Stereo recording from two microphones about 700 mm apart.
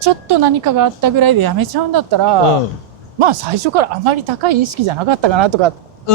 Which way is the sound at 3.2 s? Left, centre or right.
Right.